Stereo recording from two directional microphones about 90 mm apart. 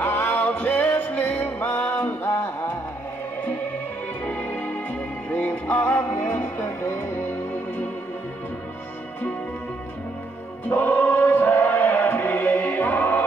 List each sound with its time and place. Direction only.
0.0 s music: 25° left (ahead or behind)
10.7 s choir: 20° left (ahead or behind)